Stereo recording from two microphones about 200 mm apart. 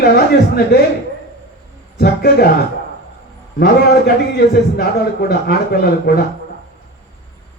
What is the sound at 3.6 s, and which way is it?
A man's voice, 50° left (ahead or behind).